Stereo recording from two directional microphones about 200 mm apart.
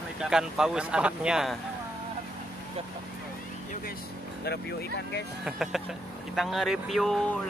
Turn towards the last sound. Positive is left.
turn(degrees=0)  # may be behind; listen again after turning